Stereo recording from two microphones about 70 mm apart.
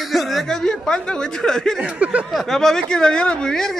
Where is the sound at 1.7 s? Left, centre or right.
Centre.